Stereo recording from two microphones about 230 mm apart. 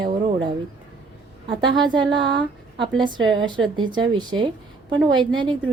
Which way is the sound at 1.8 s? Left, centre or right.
Centre.